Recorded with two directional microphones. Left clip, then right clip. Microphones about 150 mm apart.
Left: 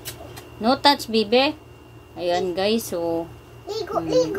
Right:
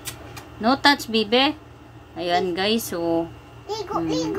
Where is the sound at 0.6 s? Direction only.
Centre (ahead or behind).